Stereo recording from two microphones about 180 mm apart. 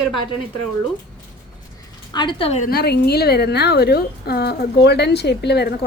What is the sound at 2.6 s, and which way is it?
A woman's voice, 60° left (ahead or behind).